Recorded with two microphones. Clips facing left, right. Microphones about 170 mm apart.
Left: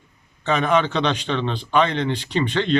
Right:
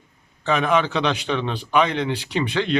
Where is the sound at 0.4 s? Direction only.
5° right (ahead or behind).